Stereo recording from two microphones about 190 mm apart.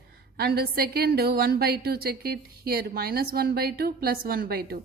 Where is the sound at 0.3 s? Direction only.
55° right (ahead or behind).